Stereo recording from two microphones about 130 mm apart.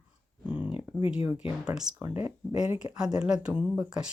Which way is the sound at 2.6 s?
5° right (ahead or behind).